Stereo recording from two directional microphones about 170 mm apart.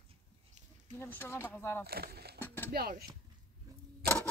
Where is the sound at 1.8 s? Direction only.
65° right (ahead or behind).